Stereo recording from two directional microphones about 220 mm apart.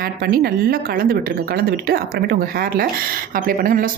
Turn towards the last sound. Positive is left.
turn(degrees=-40)  # may be behind; listen again after turning